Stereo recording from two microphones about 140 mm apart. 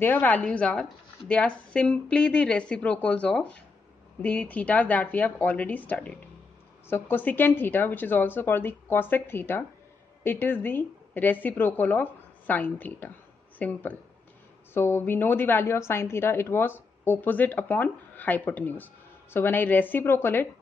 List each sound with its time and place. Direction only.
0.0 s a woman's voice: 15° left (ahead or behind)